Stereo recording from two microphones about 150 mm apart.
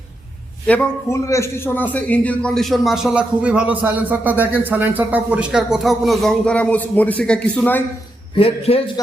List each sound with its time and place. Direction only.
0.7 s a man's voice: 20° left (ahead or behind)
8.4 s a man's voice: 40° left (ahead or behind)